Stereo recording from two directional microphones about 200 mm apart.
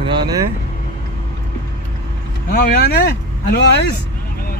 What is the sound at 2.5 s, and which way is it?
Speech, 45° left (ahead or behind).